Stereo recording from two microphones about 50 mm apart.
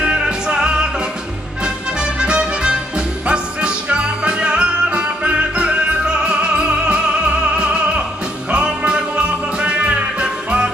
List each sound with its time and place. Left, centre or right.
0.0 s music: centre